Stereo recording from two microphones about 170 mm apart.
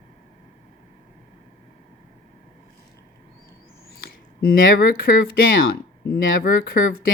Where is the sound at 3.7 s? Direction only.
65° left (ahead or behind).